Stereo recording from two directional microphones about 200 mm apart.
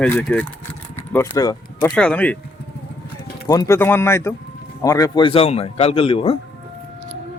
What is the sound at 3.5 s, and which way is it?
A man's voice, 15° left (ahead or behind).